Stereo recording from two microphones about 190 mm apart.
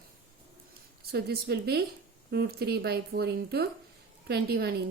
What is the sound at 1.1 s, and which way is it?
A woman's voice, 55° right (ahead or behind).